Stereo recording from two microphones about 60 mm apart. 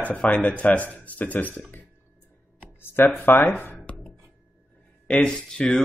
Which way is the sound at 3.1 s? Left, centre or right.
Left.